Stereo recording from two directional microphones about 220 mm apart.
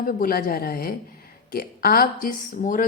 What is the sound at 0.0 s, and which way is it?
Speech, 40° left (ahead or behind).